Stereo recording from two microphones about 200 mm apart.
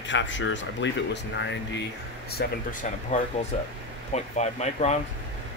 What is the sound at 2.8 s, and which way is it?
Speech, 40° left (ahead or behind).